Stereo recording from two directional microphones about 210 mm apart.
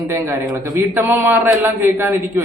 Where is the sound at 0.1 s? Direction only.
10° right (ahead or behind).